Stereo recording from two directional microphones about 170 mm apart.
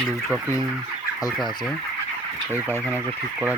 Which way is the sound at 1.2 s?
25° left (ahead or behind).